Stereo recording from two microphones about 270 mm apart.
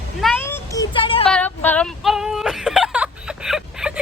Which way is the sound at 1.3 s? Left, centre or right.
Centre.